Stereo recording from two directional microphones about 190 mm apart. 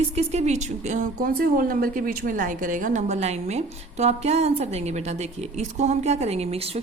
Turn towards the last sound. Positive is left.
turn(degrees=-30)  # may be behind; listen again after turning